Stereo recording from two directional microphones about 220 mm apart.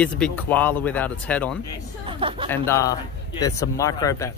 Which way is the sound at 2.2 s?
25° right (ahead or behind).